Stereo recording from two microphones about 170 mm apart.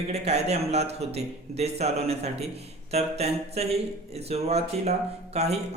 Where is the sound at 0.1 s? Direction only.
40° right (ahead or behind).